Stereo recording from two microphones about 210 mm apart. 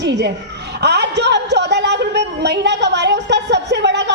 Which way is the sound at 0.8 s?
55° right (ahead or behind).